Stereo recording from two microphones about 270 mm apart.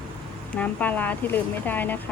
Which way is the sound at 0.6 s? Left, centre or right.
Centre.